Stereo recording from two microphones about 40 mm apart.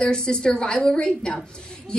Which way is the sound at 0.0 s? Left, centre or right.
Left.